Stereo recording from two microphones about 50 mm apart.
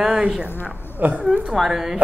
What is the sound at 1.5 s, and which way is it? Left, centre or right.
Speech, centre.